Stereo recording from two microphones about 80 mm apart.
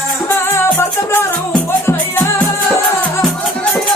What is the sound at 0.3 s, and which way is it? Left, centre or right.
Music, left.